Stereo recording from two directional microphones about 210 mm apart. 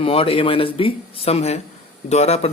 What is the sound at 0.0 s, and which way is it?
Speech, 25° left (ahead or behind).